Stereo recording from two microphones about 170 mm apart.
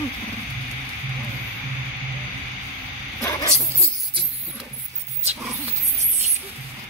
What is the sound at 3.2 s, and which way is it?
Dog, 20° left (ahead or behind).